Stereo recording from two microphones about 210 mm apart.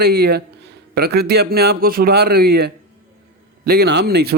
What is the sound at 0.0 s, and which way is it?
A man's voice, 50° right (ahead or behind).